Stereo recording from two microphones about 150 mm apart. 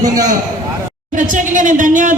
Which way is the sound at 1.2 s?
60° right (ahead or behind).